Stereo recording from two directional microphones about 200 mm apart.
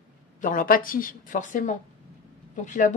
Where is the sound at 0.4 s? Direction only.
40° left (ahead or behind).